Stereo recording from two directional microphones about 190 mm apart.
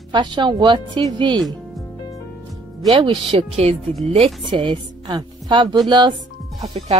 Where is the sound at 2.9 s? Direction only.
30° right (ahead or behind).